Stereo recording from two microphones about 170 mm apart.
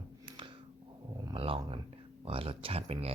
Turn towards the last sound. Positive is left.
turn(degrees=-35)  # may be behind; listen again after turning